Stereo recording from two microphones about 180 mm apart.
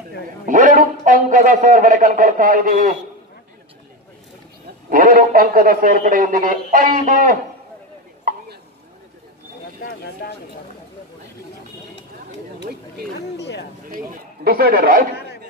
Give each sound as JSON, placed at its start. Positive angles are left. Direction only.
{"t": 0.5, "sound": "a man's voice", "side_deg": -45}
{"t": 4.8, "sound": "a man's voice", "side_deg": -50}
{"t": 13.4, "sound": "a sound", "side_deg": 75}
{"t": 13.8, "sound": "speech", "side_deg": -50}